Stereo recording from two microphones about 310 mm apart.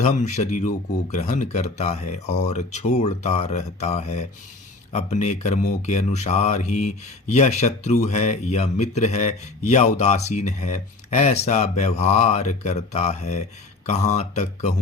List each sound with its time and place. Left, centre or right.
0.0 s speech: left